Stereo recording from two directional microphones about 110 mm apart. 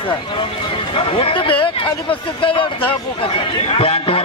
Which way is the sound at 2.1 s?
50° left (ahead or behind).